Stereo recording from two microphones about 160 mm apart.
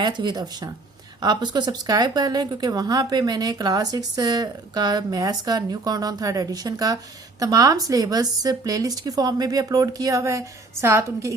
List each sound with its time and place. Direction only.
0.0 s speech: 30° right (ahead or behind)